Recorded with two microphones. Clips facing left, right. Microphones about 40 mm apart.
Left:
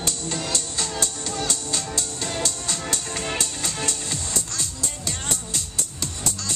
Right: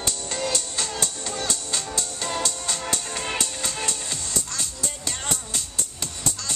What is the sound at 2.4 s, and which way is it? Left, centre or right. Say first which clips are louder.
Music: even; right.